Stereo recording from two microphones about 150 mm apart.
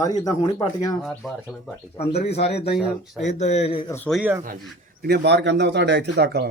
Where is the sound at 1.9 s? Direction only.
45° left (ahead or behind).